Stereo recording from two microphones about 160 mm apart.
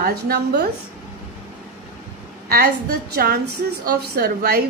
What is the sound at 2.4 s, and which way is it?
A woman's voice, 70° right (ahead or behind).